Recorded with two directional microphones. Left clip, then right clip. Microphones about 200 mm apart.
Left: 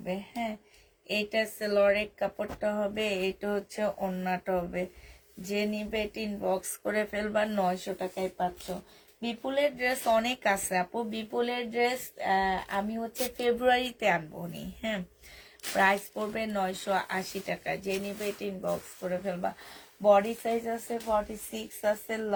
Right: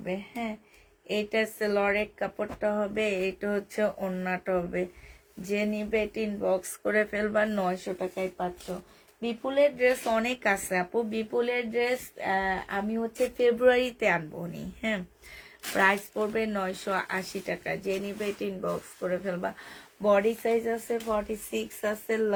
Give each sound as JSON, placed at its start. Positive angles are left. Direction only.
{"t": 0.0, "sound": "speech", "side_deg": -30}